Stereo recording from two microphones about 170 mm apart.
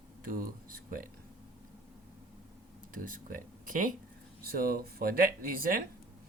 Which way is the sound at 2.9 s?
55° right (ahead or behind).